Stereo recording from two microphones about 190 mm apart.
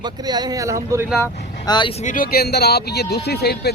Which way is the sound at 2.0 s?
45° left (ahead or behind).